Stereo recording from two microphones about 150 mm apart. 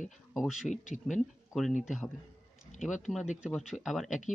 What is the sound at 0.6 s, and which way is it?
Speech, 55° left (ahead or behind).